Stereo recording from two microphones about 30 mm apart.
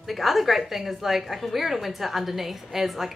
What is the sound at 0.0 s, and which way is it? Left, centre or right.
A woman's voice, centre.